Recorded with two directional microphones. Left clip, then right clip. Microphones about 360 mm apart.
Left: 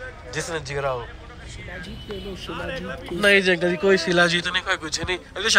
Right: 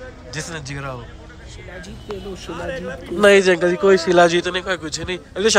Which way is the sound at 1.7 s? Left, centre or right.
Right.